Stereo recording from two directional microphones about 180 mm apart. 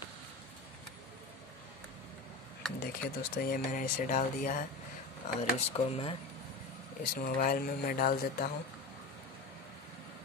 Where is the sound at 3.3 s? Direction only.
50° left (ahead or behind).